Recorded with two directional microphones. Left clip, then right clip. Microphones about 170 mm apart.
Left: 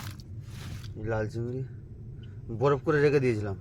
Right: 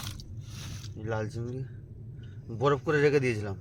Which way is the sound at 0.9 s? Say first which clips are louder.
Left 3 dB; 35° left (ahead or behind).